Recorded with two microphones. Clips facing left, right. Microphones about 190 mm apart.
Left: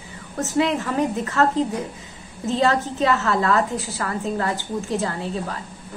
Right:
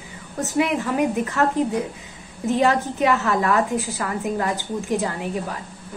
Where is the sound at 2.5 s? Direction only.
15° right (ahead or behind).